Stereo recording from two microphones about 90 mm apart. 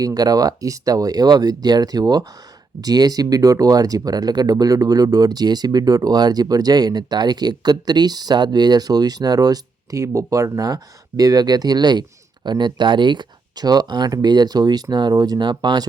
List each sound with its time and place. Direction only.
0.0 s speech: 45° right (ahead or behind)